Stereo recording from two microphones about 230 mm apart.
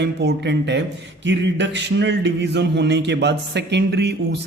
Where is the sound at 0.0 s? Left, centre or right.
Right.